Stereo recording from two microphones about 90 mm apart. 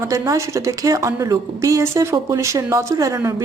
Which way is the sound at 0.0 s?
35° right (ahead or behind).